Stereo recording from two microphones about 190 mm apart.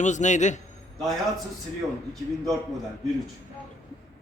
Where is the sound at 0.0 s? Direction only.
40° left (ahead or behind).